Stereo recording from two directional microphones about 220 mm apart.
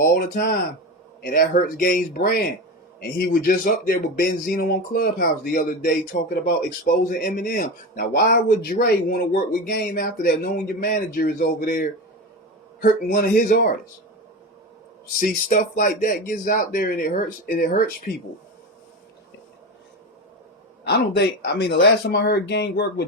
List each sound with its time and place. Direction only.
0.0 s speech: 40° left (ahead or behind)
15.2 s speech: 35° left (ahead or behind)
20.8 s speech: 45° left (ahead or behind)